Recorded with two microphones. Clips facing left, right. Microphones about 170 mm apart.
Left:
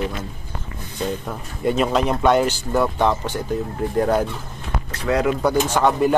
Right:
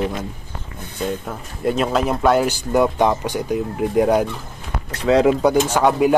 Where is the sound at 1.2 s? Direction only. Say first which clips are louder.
Even; centre (ahead or behind).